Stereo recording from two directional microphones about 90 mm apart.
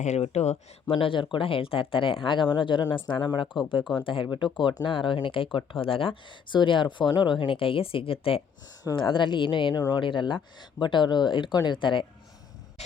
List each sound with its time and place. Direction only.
0.9 s speech: 80° left; by 3.4 s 55° left (ahead or behind)
3.9 s speech: 70° left (ahead or behind); by 8.4 s 90° left
9.0 s speech: 65° left (ahead or behind)
9.7 s speech: 45° left (ahead or behind)
10.0 s speech: 65° left (ahead or behind)